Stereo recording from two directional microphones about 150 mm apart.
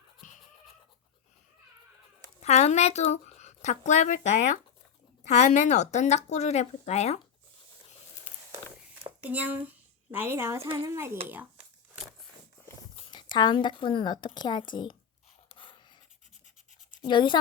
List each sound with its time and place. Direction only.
0.2 s fowl: 55° left (ahead or behind)
2.4 s speech: 50° left (ahead or behind)
9.2 s a woman's voice: 10° right (ahead or behind)
13.1 s a woman's voice: 30° left (ahead or behind)
15.4 s a sound: 35° left (ahead or behind)
16.9 s speech: 30° left (ahead or behind)